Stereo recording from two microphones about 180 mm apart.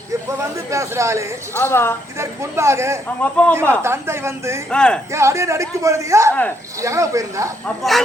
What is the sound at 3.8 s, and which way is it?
Speech, 15° right (ahead or behind).